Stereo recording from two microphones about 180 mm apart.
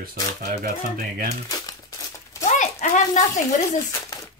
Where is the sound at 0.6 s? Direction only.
55° right (ahead or behind).